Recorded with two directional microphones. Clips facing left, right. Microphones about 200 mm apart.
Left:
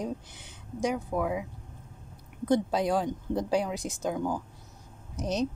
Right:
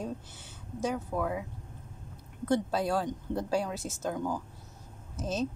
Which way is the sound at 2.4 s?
15° left (ahead or behind).